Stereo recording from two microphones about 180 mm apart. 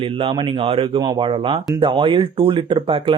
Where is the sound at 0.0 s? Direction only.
30° right (ahead or behind).